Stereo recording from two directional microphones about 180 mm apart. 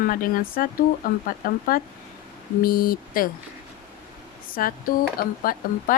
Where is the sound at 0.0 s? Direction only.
50° left (ahead or behind).